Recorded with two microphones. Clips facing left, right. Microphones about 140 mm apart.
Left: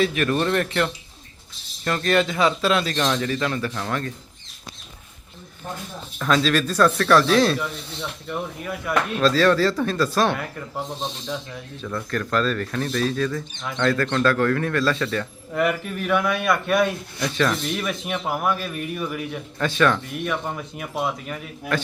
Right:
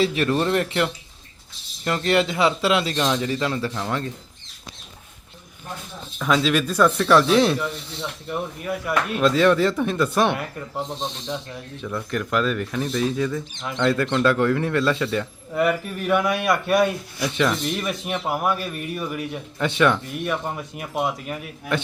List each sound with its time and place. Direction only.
0.0 s speech: 25° right (ahead or behind)
6.1 s speech: 10° right (ahead or behind)
9.2 s speech: 20° right (ahead or behind)
11.8 s speech: 10° right (ahead or behind)
15.5 s speech: 5° right (ahead or behind)
17.2 s speech: 20° right (ahead or behind)
17.5 s speech: centre (ahead or behind)
19.5 s speech: 20° right (ahead or behind)
20.2 s speech: 10° right (ahead or behind)